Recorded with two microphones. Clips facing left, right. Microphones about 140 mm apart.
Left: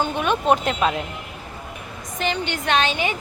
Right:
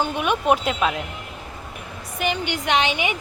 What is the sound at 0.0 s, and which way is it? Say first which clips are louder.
A woman's voice: left 1 dB; 10° right (ahead or behind).